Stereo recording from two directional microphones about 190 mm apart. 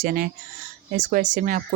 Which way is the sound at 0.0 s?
50° right (ahead or behind).